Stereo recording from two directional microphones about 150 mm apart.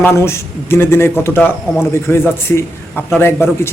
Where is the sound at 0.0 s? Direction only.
20° left (ahead or behind).